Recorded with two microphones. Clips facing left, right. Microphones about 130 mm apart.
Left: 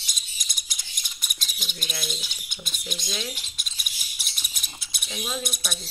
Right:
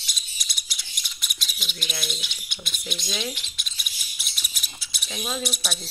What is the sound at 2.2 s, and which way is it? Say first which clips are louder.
Speech: right 1 dB; 45° left (ahead or behind).